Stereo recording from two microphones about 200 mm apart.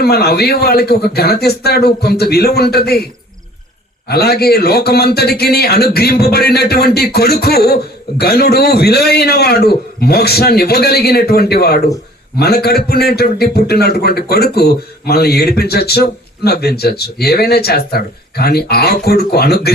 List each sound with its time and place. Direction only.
0.0 s a man's voice: 50° left (ahead or behind)
4.1 s a man's voice: 50° left (ahead or behind)